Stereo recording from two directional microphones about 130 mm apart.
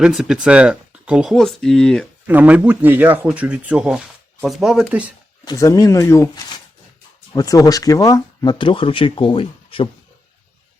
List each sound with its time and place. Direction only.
0.0 s speech: 5° right (ahead or behind)
2.2 s speech: 10° right (ahead or behind)
5.5 s speech: 25° left (ahead or behind)
8.5 s speech: 40° left (ahead or behind)